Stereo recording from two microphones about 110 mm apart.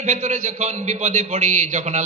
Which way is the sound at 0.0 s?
90° right.